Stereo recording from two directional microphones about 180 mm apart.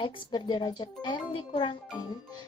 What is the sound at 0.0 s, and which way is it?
Speech, 25° left (ahead or behind).